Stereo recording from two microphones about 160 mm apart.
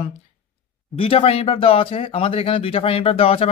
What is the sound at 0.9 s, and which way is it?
Speech, 35° left (ahead or behind).